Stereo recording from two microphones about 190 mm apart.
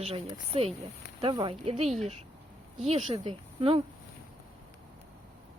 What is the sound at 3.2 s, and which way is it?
Speech, 30° right (ahead or behind).